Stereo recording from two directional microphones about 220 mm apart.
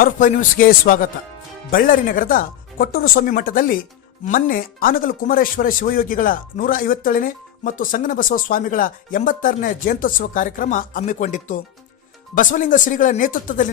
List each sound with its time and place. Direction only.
0.0 s speech: 40° left (ahead or behind)